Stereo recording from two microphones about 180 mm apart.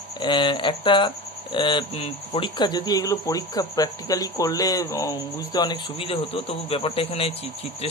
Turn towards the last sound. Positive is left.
turn(degrees=30)  # may be behind; listen again after turning